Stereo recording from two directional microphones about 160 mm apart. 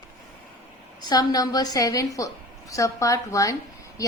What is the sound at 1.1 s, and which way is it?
A woman's voice, 25° left (ahead or behind).